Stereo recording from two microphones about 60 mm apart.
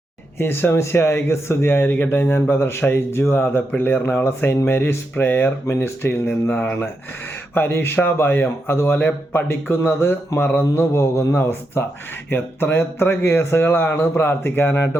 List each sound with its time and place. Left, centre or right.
0.3 s a man's voice: left
6.5 s a man's voice: left